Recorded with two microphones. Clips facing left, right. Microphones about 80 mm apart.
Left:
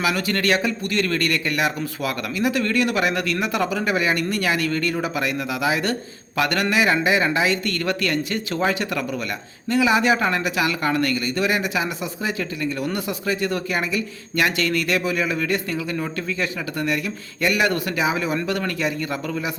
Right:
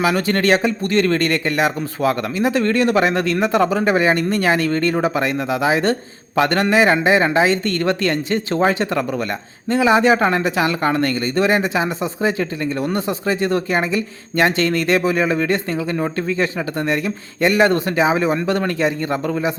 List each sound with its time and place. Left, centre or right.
0.0 s speech: right